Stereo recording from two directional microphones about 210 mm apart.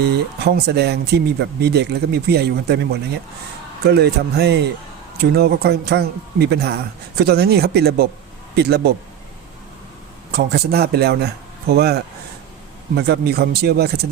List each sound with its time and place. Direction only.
0.0 s speech: 50° right (ahead or behind)
10.3 s speech: 50° right (ahead or behind)